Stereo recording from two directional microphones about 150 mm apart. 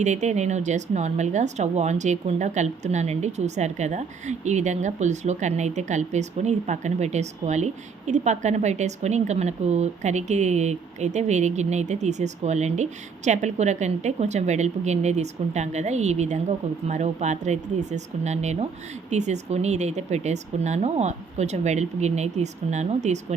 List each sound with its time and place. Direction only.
0.0 s speech: 50° right (ahead or behind)